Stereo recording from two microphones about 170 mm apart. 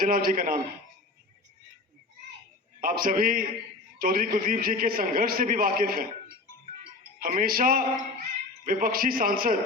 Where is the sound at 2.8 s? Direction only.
55° right (ahead or behind).